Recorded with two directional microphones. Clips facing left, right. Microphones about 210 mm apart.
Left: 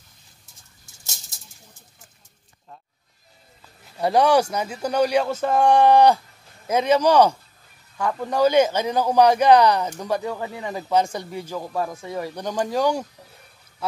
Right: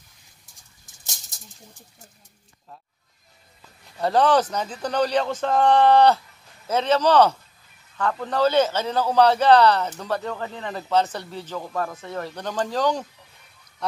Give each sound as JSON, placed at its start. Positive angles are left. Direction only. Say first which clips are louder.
{"t": 4.0, "sound": "a man's voice", "louder": "left 1 dB", "side_deg": 10}